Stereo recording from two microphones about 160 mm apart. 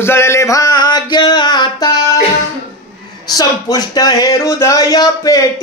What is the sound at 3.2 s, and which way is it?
Speech, 25° left (ahead or behind).